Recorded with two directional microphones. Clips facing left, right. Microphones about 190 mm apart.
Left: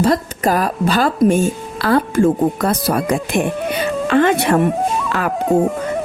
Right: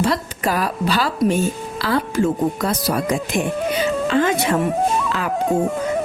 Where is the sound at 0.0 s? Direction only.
45° left (ahead or behind); by 4.6 s 60° left (ahead or behind).